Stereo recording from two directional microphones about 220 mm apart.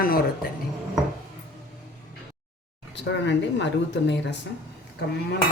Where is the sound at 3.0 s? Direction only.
50° left (ahead or behind).